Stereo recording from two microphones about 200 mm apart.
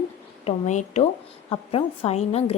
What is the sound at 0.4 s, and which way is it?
A woman's voice, 35° left (ahead or behind).